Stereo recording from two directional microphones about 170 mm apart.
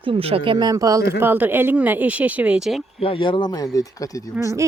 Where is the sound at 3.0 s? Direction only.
30° left (ahead or behind).